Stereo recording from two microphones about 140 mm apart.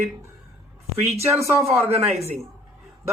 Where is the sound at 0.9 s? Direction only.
50° right (ahead or behind).